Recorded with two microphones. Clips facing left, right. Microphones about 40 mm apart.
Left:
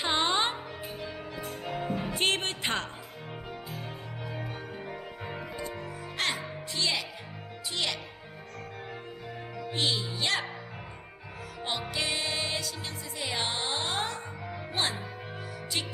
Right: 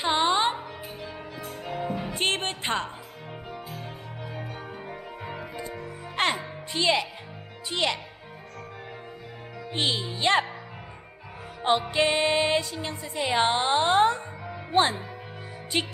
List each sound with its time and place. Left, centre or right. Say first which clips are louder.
0.0 s music: right 4 dB; centre
2.1 s music: right 1 dB; right
4.3 s music: right 1 dB; centre
6.1 s music: right 6 dB; right
6.7 s speech: right 7 dB; right
9.7 s speech: right 3 dB; right
11.9 s speech: right 9 dB; right